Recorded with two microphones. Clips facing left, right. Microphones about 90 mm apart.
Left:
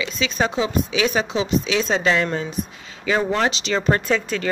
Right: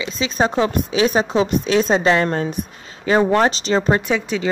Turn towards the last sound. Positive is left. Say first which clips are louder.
# right 1 dB
turn(degrees=-15)  # may be behind; listen again after turning